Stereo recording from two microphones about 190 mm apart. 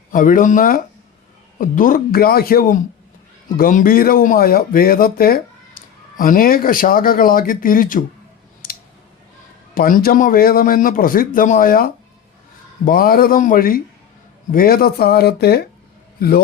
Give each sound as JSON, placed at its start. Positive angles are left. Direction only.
{"t": 0.1, "sound": "speech", "side_deg": 45}
{"t": 8.6, "sound": "scissors", "side_deg": 50}
{"t": 9.7, "sound": "speech", "side_deg": 50}